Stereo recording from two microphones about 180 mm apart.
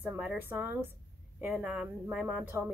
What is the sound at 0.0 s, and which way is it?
Speech, 10° right (ahead or behind).